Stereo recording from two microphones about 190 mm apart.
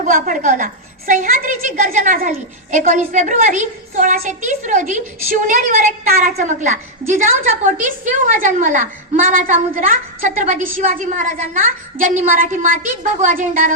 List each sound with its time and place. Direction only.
0.0 s a woman's voice: 45° right (ahead or behind)